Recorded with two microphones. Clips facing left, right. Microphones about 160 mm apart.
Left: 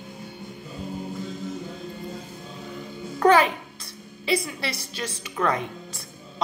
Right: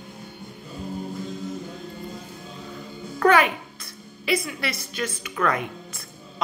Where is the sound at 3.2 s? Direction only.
30° left (ahead or behind).